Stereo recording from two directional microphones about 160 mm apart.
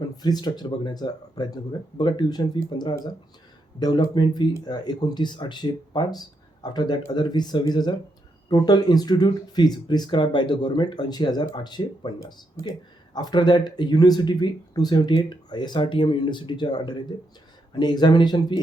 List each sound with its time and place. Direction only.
0.2 s speech: 25° left (ahead or behind)